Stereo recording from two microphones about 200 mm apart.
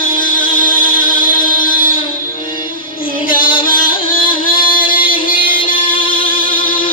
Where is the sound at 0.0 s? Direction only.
45° left (ahead or behind).